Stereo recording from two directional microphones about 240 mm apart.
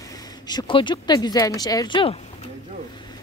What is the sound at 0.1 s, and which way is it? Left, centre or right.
Speech, centre.